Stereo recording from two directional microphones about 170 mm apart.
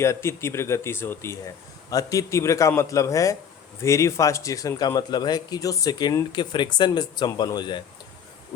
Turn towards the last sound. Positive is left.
turn(degrees=25)  # may be behind; listen again after turning